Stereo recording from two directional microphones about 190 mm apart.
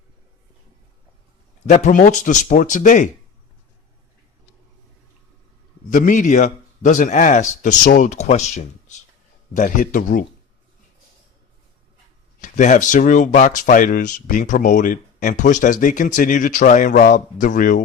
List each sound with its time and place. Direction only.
1.6 s a man's voice: 40° left (ahead or behind)
5.9 s a man's voice: 45° left (ahead or behind)
12.4 s speech: 40° left (ahead or behind)